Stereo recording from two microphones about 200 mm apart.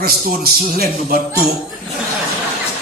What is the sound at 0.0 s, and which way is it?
Speech, 50° right (ahead or behind).